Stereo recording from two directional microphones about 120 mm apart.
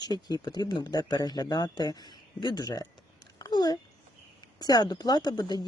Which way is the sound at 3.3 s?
35° left (ahead or behind).